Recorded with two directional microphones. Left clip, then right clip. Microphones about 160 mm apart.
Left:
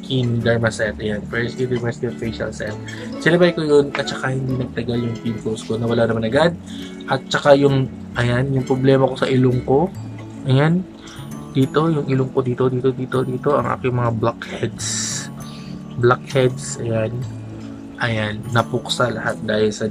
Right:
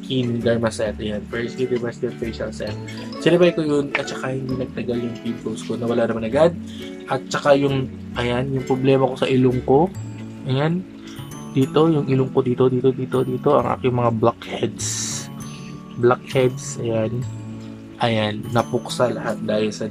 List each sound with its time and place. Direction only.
0.1 s a man's voice: 10° right (ahead or behind)
11.7 s a man's voice: 15° right (ahead or behind)